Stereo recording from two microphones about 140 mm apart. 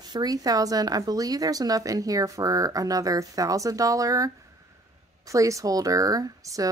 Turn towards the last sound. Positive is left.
turn(degrees=-25)  # may be behind; listen again after turning